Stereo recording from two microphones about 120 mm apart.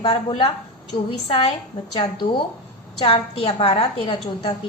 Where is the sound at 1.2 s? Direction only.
55° left (ahead or behind).